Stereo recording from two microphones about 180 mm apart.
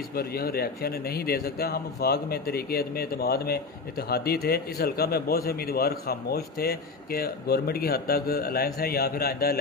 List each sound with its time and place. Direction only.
0.1 s a man's voice: 60° left (ahead or behind)